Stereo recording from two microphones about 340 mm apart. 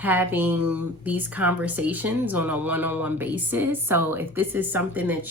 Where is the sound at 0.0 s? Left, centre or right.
Centre.